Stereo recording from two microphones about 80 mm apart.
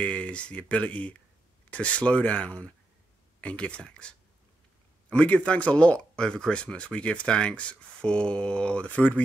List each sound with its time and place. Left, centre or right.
0.0 s speech: centre
5.1 s speech: centre